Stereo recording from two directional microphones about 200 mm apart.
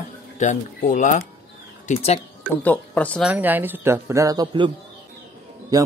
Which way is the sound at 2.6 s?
10° left (ahead or behind).